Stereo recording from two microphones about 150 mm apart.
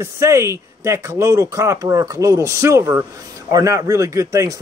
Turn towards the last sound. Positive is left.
turn(degrees=-20)  # may be behind; listen again after turning